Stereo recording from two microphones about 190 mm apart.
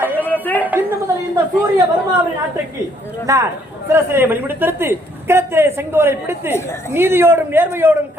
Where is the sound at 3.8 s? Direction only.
10° right (ahead or behind).